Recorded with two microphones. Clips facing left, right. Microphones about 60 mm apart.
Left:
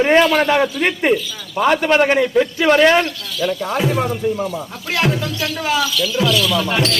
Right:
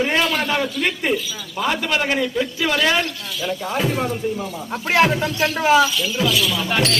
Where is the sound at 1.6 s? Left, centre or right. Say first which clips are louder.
Left 7 dB; left.